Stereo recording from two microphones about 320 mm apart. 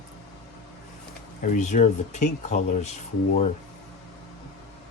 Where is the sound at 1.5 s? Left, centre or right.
Left.